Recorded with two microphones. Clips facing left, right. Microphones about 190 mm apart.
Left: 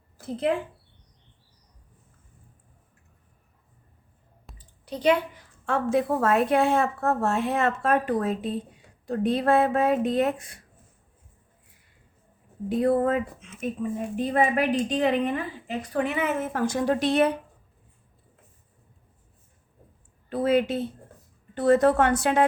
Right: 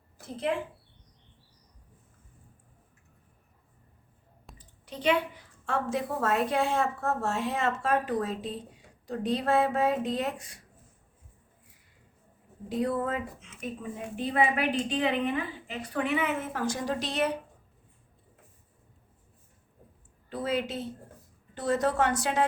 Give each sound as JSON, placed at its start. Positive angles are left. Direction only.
{"t": 4.5, "sound": "a sound", "side_deg": 35}
{"t": 5.6, "sound": "a woman's voice", "side_deg": 55}
{"t": 12.6, "sound": "a woman's voice", "side_deg": 55}
{"t": 20.3, "sound": "a woman's voice", "side_deg": 60}